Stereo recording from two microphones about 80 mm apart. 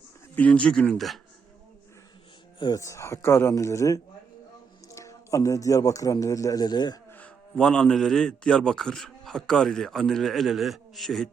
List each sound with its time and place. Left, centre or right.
0.3 s speech: centre
0.9 s a man's voice: centre
2.7 s a man's voice: left
7.5 s a man's voice: centre